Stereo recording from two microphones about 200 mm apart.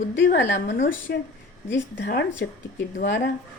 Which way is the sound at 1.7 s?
60° left (ahead or behind).